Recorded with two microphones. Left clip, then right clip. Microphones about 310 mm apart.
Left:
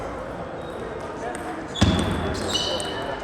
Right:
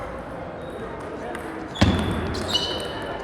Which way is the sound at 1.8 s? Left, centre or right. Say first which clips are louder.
Right 1 dB; right.